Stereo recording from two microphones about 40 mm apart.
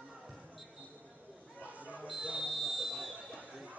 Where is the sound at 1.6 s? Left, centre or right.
Right.